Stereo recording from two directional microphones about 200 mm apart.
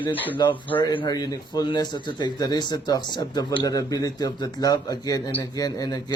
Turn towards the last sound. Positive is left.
turn(degrees=20)  # may be behind; listen again after turning